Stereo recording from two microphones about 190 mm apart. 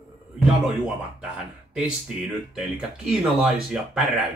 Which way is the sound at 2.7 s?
5° right (ahead or behind).